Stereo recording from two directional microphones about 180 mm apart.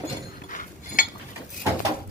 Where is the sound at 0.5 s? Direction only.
50° left (ahead or behind).